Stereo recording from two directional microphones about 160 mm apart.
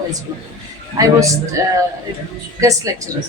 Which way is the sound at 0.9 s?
20° right (ahead or behind).